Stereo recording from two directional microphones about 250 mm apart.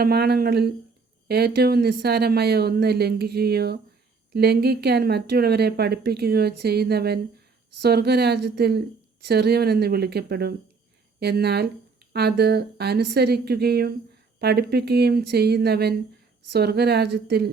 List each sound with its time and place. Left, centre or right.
0.0 s a woman's voice: right